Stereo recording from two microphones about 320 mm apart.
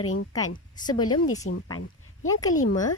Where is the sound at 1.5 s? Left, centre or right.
Left.